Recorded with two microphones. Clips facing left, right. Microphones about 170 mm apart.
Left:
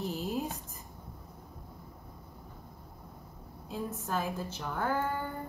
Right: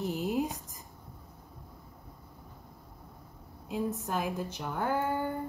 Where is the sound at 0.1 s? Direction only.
15° right (ahead or behind).